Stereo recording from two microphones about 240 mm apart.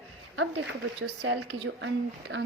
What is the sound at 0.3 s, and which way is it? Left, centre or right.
A woman's voice, right.